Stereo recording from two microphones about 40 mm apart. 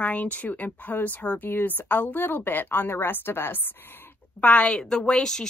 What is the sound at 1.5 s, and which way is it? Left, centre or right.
A woman's voice, left.